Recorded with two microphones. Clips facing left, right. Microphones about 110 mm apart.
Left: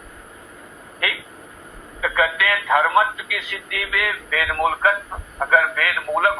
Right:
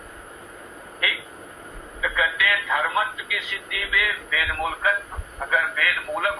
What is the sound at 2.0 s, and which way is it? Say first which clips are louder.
Telephone: left 4 dB; 55° left (ahead or behind).